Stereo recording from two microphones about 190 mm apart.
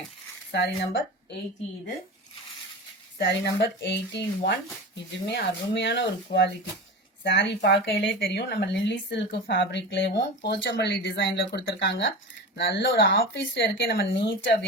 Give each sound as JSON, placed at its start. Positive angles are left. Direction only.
{"t": 0.5, "sound": "speech", "side_deg": 65}
{"t": 3.2, "sound": "speech", "side_deg": 60}
{"t": 13.8, "sound": "speech", "side_deg": 55}